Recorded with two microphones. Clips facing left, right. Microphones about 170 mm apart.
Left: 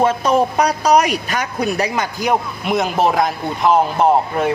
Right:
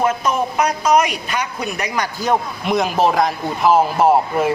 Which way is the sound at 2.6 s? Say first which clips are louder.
Even; centre (ahead or behind).